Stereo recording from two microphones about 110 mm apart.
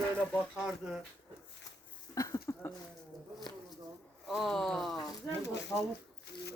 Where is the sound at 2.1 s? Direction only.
30° left (ahead or behind).